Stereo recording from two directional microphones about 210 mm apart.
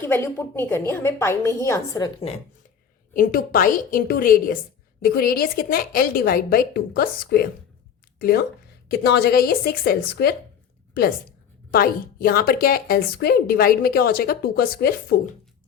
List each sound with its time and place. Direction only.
0.1 s a woman's voice: 10° left (ahead or behind)
3.1 s a woman's voice: 40° left (ahead or behind)
8.9 s a woman's voice: 50° left (ahead or behind)